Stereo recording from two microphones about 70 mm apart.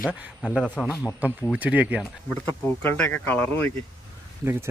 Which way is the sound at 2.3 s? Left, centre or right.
Left.